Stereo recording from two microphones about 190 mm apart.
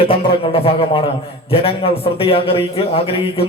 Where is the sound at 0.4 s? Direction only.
30° left (ahead or behind).